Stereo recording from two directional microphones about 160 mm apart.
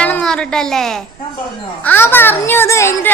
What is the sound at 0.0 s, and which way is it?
A woman's voice, 5° left (ahead or behind).